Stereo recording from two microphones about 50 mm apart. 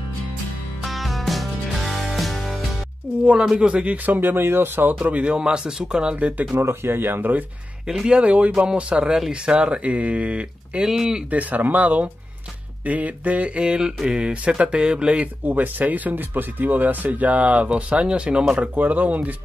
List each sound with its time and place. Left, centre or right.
0.8 s music: centre
3.6 s speech: right
5.0 s speech: right
6.1 s speech: right
6.5 s speech: right
7.8 s speech: centre
8.2 s speech: right
10.9 s speech: centre
11.2 s speech: right
15.4 s speech: right
18.8 s speech: right